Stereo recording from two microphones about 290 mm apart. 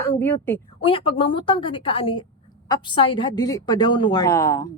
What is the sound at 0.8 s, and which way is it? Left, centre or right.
A woman's voice, centre.